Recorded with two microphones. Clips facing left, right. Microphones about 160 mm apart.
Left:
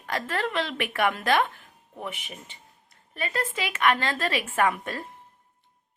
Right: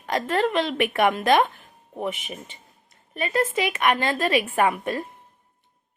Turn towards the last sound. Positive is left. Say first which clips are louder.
# right 3 dB
turn(degrees=-15)  # may be behind; listen again after turning